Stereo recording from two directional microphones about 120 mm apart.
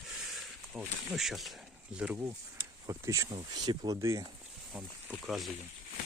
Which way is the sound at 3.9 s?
25° right (ahead or behind).